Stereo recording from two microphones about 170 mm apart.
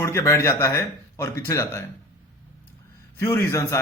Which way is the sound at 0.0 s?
15° left (ahead or behind).